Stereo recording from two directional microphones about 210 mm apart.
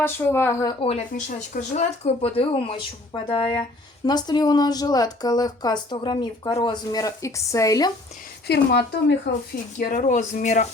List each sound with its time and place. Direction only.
0.0 s a woman's voice: 10° left (ahead or behind)
8.4 s speech: 55° left (ahead or behind)
9.7 s speech: 40° left (ahead or behind)